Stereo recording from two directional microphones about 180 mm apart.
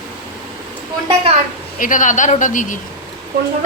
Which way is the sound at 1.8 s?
45° left (ahead or behind).